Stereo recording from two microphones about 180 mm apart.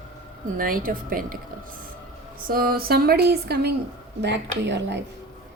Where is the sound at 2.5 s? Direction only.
55° right (ahead or behind); by 4.9 s 70° right (ahead or behind).